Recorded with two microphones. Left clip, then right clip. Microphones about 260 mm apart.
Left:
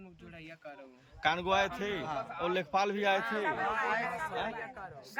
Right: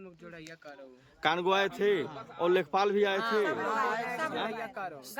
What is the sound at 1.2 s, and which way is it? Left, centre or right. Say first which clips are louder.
Speech: right 2 dB; centre.